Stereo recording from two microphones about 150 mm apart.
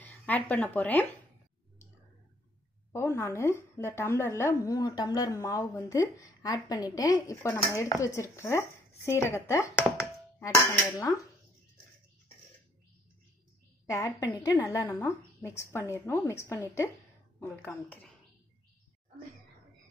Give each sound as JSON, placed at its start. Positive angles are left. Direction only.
{"t": 0.0, "sound": "speech", "side_deg": 10}
{"t": 2.9, "sound": "a woman's voice", "side_deg": 20}
{"t": 13.8, "sound": "a woman's voice", "side_deg": 20}